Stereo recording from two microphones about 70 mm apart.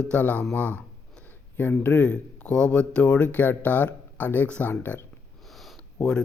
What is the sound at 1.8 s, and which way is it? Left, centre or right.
Speech, left.